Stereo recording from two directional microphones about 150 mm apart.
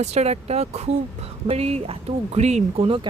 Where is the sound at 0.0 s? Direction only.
45° right (ahead or behind).